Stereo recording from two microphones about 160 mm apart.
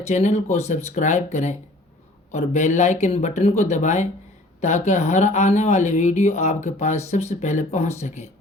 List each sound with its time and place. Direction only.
0.1 s speech: 45° left (ahead or behind)